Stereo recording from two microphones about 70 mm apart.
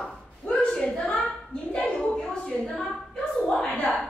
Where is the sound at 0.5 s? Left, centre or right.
Centre.